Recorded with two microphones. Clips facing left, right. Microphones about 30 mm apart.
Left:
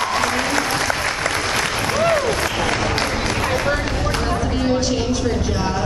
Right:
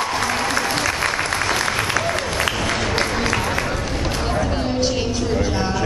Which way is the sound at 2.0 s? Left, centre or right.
Left.